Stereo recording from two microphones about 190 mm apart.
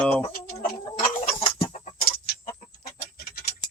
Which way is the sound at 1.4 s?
30° left (ahead or behind).